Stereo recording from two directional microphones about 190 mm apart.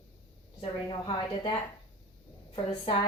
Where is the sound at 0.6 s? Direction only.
30° left (ahead or behind).